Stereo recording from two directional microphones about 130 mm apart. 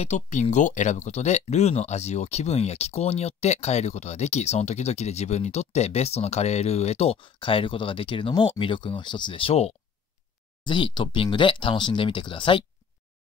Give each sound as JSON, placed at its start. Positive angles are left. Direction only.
{"t": 0.0, "sound": "speech", "side_deg": 65}
{"t": 10.6, "sound": "speech", "side_deg": 40}